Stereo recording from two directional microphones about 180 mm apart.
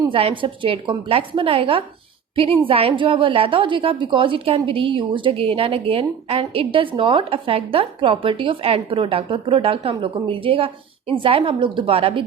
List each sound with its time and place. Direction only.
0.0 s a woman's voice: 30° right (ahead or behind)